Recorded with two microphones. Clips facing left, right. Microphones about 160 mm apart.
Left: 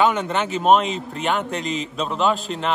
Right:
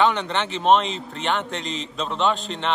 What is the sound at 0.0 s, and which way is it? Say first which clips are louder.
A man's voice: left 2 dB; 5° left (ahead or behind).